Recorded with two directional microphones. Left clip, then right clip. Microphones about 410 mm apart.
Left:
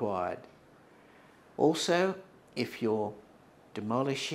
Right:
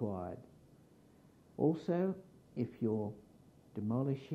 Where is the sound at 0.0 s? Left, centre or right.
Centre.